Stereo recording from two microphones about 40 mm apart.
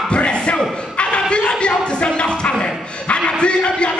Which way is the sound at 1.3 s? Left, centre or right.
Left.